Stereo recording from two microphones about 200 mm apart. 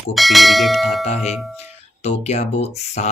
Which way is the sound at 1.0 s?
35° left (ahead or behind).